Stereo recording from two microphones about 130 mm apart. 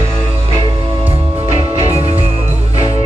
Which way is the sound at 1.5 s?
50° right (ahead or behind).